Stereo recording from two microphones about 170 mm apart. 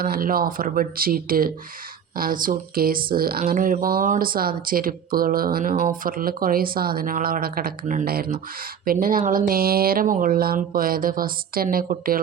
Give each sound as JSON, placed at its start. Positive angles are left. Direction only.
{"t": 0.0, "sound": "speech", "side_deg": -60}